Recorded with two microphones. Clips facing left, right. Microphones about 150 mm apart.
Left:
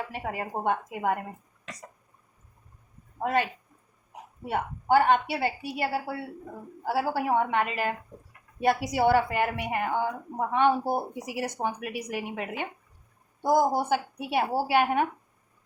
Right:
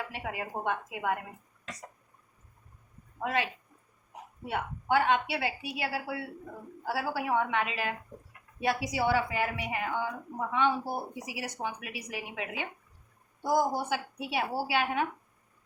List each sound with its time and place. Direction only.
0.1 s a woman's voice: 40° left (ahead or behind)
3.2 s a woman's voice: 45° left (ahead or behind)